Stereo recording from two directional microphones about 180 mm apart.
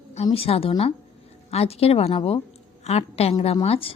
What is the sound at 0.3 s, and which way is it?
A woman's voice, 30° left (ahead or behind).